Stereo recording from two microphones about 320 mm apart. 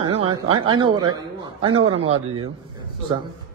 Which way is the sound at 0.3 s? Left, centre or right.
Centre.